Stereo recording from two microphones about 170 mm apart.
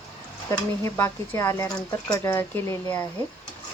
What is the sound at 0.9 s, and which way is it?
Speech, 15° left (ahead or behind).